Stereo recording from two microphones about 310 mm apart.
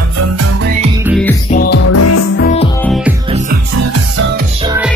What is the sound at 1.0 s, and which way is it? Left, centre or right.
Music, centre.